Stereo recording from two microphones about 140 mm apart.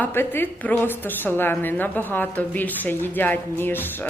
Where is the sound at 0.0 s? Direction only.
15° left (ahead or behind).